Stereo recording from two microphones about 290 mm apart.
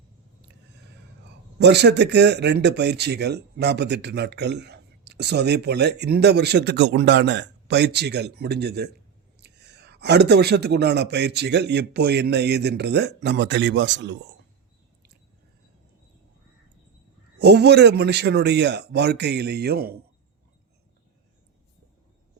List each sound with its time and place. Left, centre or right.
1.5 s speech: right
17.4 s speech: right